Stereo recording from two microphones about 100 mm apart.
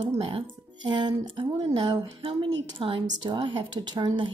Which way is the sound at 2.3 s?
65° right (ahead or behind).